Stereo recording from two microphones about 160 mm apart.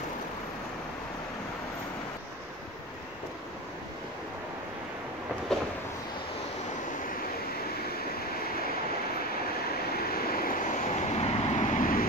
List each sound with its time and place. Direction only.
9.9 s vehicle: 70° left (ahead or behind)